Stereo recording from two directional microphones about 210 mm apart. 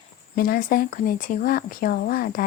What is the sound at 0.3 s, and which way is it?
Speech, 45° left (ahead or behind).